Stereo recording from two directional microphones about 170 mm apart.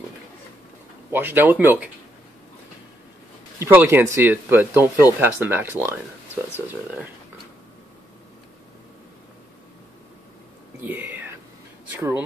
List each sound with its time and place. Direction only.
1.1 s speech: 10° right (ahead or behind)
3.5 s speech: 15° right (ahead or behind)
10.8 s whispering: 10° right (ahead or behind)
11.9 s speech: 15° right (ahead or behind)